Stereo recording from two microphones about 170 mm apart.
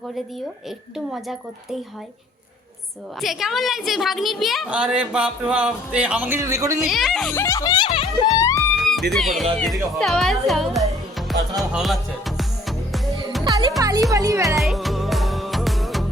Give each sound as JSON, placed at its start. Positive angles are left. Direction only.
{"t": 0.9, "sound": "a woman's voice", "side_deg": 0}
{"t": 3.2, "sound": "a woman's voice", "side_deg": 0}
{"t": 6.8, "sound": "a woman's voice", "side_deg": 0}
{"t": 7.3, "sound": "speech", "side_deg": 20}
{"t": 8.3, "sound": "music", "side_deg": 20}
{"t": 9.6, "sound": "a woman's voice", "side_deg": 0}
{"t": 11.3, "sound": "music", "side_deg": 0}
{"t": 13.5, "sound": "music", "side_deg": -20}
{"t": 14.1, "sound": "speech", "side_deg": -20}
{"t": 14.4, "sound": "music", "side_deg": 0}